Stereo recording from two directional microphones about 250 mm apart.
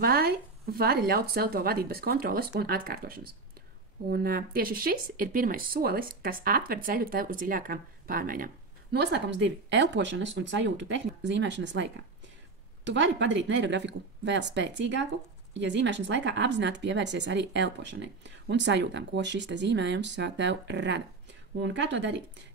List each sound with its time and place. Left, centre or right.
0.0 s a woman's voice: right